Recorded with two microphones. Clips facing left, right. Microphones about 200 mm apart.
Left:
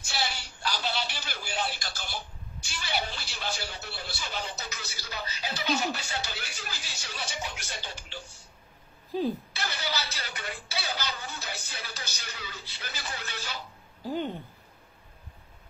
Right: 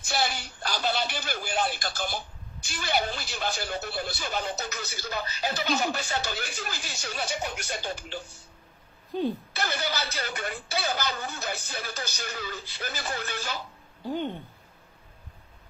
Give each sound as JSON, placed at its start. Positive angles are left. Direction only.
{"t": 0.1, "sound": "a sound", "side_deg": -50}
{"t": 2.7, "sound": "a woman's voice", "side_deg": -50}
{"t": 9.1, "sound": "speech", "side_deg": 0}
{"t": 9.6, "sound": "a woman's voice", "side_deg": -50}
{"t": 14.0, "sound": "speech", "side_deg": 5}